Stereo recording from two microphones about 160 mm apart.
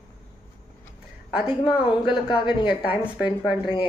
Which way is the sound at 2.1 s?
30° left (ahead or behind).